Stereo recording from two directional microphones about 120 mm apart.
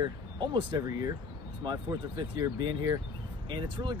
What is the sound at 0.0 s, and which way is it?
Speech, 40° right (ahead or behind).